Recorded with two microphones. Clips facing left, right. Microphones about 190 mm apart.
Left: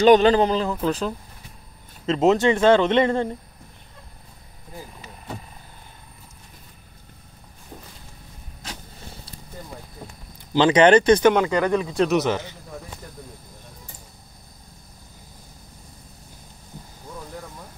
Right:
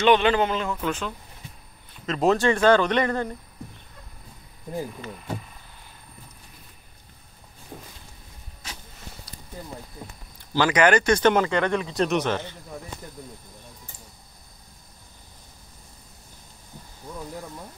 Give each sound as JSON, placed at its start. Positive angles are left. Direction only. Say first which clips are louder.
{"t": 0.0, "sound": "a man's voice", "louder": "left 5 dB", "side_deg": 40}
{"t": 2.0, "sound": "speech", "louder": "left 3 dB", "side_deg": 20}
{"t": 7.7, "sound": "a sound", "louder": "right 1 dB", "side_deg": -10}
{"t": 10.5, "sound": "speech", "louder": "left 5 dB", "side_deg": 25}
{"t": 11.4, "sound": "speech", "louder": "left 3 dB", "side_deg": 10}